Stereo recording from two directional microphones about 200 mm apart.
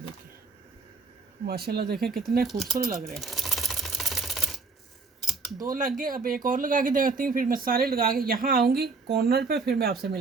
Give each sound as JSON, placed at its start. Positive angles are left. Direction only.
{"t": 1.5, "sound": "speech", "side_deg": -50}
{"t": 2.0, "sound": "speech", "side_deg": 0}
{"t": 3.0, "sound": "typewriter", "side_deg": 0}
{"t": 5.2, "sound": "typing", "side_deg": 0}
{"t": 5.6, "sound": "speech", "side_deg": -45}